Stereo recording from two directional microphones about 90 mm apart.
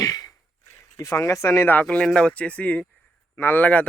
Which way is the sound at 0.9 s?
35° left (ahead or behind).